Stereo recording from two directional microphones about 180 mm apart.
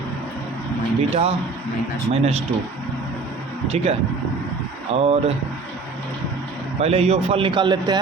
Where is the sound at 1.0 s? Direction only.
35° right (ahead or behind).